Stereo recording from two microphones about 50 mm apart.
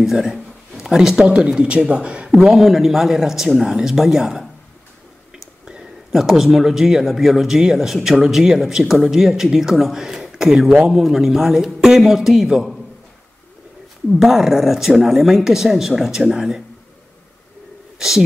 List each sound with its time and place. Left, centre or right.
0.0 s speech: centre
2.5 s speech: centre
5.7 s speech: centre
14.2 s speech: centre
17.9 s speech: centre